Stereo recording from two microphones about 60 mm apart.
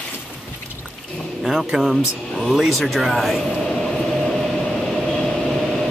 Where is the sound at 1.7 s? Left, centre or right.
Centre.